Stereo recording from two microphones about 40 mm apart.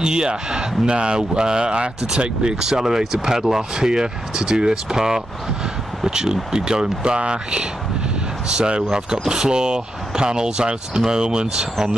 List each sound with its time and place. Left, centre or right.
0.0 s speech: centre